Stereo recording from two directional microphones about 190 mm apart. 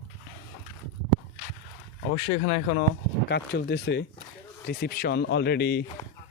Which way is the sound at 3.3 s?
60° left (ahead or behind).